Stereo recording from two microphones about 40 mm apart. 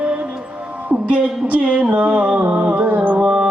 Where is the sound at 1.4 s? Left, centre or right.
Right.